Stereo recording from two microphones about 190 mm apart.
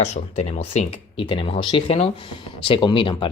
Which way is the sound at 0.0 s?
35° left (ahead or behind).